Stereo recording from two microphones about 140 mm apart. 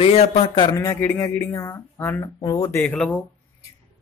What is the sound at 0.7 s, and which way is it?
Speech, 20° left (ahead or behind).